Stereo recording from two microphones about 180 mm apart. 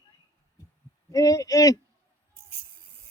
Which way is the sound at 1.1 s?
20° left (ahead or behind).